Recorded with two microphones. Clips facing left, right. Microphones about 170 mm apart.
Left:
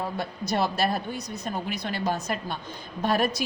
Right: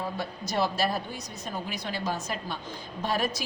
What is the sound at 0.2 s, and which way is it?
A woman's voice, 60° left (ahead or behind).